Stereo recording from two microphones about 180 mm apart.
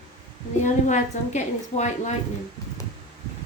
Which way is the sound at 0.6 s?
40° left (ahead or behind).